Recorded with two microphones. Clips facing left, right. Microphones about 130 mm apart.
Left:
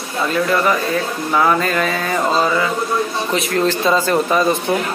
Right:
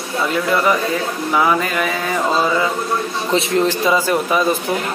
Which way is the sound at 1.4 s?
15° right (ahead or behind).